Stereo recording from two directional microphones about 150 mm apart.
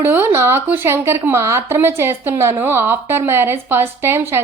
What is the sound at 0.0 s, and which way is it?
A woman's voice, 15° right (ahead or behind).